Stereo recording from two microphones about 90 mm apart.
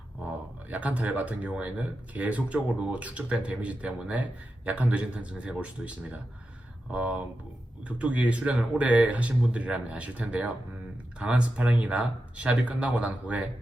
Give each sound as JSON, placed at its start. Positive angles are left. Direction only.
{"t": 0.3, "sound": "speech", "side_deg": -15}